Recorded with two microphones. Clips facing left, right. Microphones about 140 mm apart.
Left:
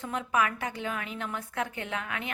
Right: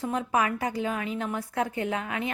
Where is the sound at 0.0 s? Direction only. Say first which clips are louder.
Right 3 dB; 30° right (ahead or behind).